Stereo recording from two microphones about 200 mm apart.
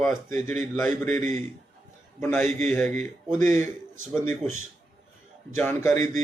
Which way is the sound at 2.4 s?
35° right (ahead or behind).